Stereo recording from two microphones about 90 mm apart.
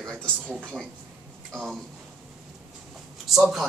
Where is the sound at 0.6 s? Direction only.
15° right (ahead or behind).